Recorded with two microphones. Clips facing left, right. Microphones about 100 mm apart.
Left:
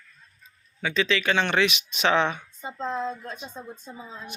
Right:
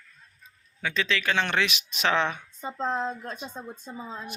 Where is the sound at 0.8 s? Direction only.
Centre (ahead or behind).